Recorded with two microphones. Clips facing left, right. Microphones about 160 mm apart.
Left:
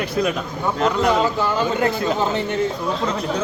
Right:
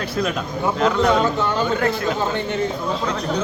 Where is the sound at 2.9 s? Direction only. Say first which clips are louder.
Even; 5° left (ahead or behind).